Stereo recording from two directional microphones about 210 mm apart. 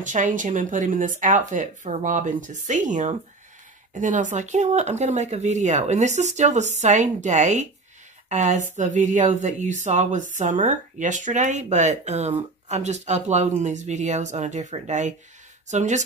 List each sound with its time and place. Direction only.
0.0 s speech: 35° right (ahead or behind)